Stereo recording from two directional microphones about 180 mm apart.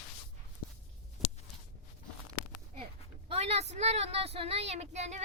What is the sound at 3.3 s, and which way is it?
A woman's voice, 35° right (ahead or behind).